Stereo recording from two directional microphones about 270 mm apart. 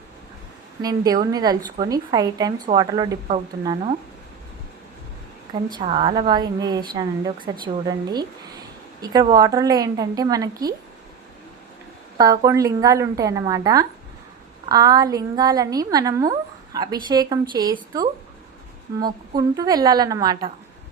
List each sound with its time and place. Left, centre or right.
0.8 s a woman's voice: centre
5.7 s a woman's voice: centre
12.1 s a woman's voice: centre
18.9 s a woman's voice: centre